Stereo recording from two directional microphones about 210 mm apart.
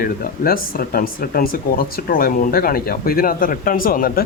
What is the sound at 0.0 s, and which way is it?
Speech, 45° left (ahead or behind).